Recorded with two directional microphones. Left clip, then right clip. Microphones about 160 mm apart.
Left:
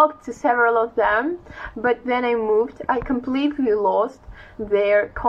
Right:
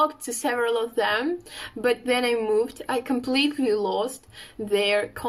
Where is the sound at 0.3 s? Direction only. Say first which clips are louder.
Left 7 dB; 55° right (ahead or behind).